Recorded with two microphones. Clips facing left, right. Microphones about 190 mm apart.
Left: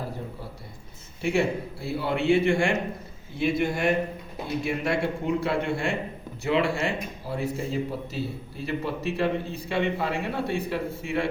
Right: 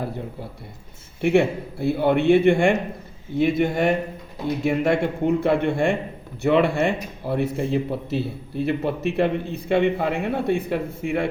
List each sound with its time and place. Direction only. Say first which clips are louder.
1.2 s a man's voice: right 6 dB; 60° right (ahead or behind)